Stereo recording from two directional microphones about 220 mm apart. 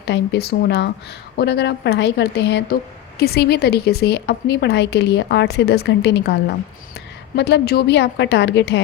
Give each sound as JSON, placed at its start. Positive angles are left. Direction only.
{"t": 0.0, "sound": "a woman's voice", "side_deg": 50}